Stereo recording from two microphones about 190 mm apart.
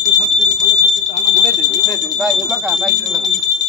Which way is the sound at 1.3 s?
Centre (ahead or behind).